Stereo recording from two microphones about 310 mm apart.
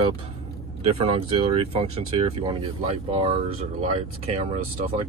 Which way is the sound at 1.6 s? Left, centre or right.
Centre.